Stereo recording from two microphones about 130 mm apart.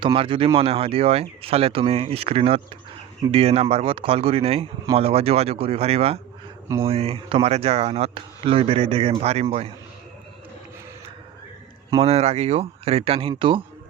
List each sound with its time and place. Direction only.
0.0 s speech: 45° right (ahead or behind)
11.9 s speech: 55° right (ahead or behind)